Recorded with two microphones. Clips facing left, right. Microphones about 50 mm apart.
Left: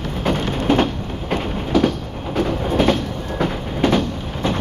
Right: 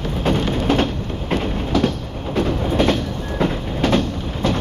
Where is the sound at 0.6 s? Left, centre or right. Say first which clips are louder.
Left 3 dB; centre.